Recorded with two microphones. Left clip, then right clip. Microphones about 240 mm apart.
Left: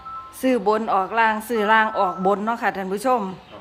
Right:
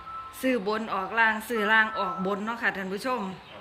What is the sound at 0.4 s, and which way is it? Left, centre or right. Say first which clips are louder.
A woman's voice: left 8 dB; centre.